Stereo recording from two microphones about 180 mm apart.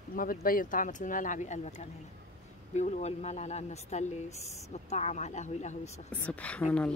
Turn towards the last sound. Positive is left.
turn(degrees=5)  # may be behind; listen again after turning